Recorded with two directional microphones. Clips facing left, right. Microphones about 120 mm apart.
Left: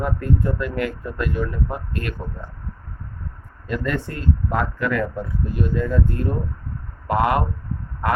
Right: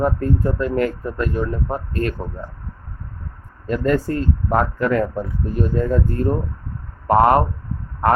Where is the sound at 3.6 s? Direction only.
40° right (ahead or behind).